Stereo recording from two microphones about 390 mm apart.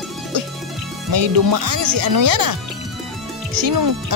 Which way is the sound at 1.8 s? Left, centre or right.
Right.